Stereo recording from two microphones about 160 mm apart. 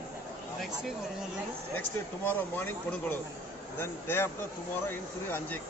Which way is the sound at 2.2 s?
10° left (ahead or behind).